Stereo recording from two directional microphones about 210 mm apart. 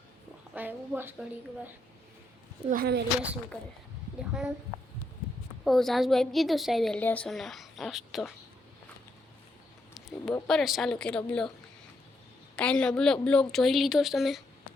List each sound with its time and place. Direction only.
0.5 s a woman's voice: 10° right (ahead or behind)
2.6 s speech: 45° right (ahead or behind)
4.2 s a woman's voice: 5° right (ahead or behind)
5.6 s a woman's voice: centre (ahead or behind)
10.3 s a woman's voice: 5° left (ahead or behind)
12.5 s a woman's voice: 5° left (ahead or behind)